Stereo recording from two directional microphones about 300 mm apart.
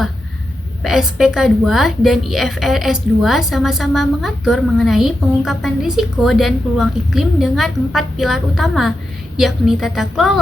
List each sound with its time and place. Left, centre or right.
0.8 s a woman's voice: centre